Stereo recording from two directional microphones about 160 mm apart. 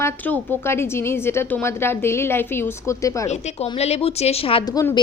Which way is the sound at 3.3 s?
40° left (ahead or behind).